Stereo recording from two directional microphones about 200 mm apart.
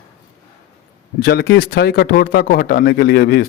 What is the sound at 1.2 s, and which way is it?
Speech, 50° left (ahead or behind).